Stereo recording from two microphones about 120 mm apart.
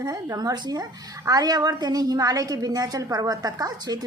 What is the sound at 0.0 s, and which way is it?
A woman's voice, 35° right (ahead or behind).